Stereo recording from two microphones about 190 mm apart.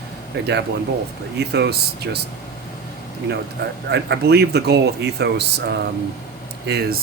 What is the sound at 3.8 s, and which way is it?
Speech, 60° right (ahead or behind).